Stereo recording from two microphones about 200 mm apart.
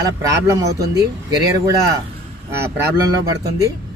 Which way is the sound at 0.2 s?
15° right (ahead or behind).